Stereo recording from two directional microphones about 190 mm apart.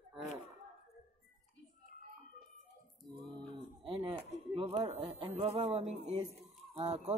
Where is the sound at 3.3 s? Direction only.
20° right (ahead or behind).